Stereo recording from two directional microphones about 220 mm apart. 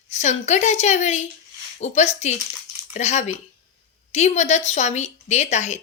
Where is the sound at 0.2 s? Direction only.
30° left (ahead or behind).